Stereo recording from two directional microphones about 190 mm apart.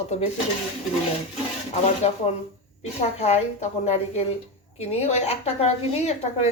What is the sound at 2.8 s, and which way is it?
A woman's voice, 35° left (ahead or behind).